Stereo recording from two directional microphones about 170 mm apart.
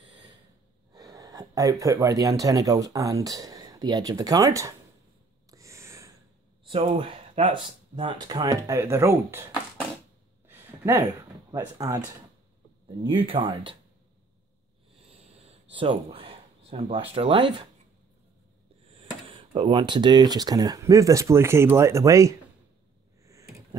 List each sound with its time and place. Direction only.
0.9 s speech: 20° right (ahead or behind)
5.5 s gasp: 20° right (ahead or behind)
6.7 s speech: 35° right (ahead or behind); by 9.8 s 15° right (ahead or behind)
10.5 s a sound: 15° right (ahead or behind)
12.8 s speech: 30° right (ahead or behind)
15.7 s speech: 30° right (ahead or behind)
18.9 s speech: 30° right (ahead or behind)